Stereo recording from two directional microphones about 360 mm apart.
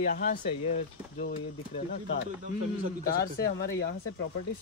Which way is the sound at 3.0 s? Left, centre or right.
Left.